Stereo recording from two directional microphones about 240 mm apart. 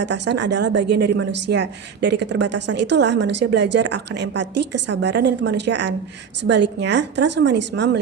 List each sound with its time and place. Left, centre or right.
0.0 s a woman's voice: right